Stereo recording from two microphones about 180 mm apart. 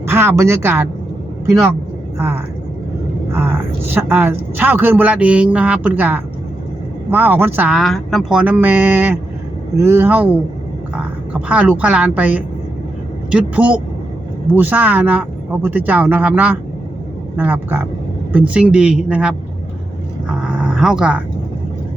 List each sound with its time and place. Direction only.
0.0 s speech: 15° right (ahead or behind)
2.1 s a woman's voice: 15° right (ahead or behind)
20.2 s dog: 5° right (ahead or behind)